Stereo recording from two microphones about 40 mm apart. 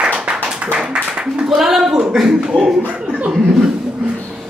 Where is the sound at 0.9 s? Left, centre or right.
Right.